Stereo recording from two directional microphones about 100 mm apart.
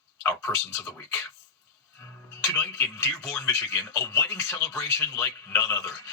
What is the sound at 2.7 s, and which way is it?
Speech, 30° left (ahead or behind).